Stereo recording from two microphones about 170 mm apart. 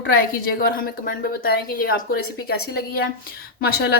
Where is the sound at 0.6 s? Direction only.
60° left (ahead or behind).